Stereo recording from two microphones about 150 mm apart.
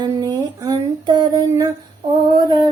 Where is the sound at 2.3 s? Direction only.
30° right (ahead or behind).